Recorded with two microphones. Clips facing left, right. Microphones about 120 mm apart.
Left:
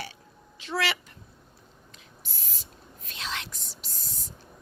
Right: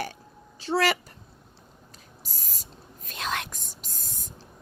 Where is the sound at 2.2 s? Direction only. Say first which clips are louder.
Right 1 dB; 40° right (ahead or behind).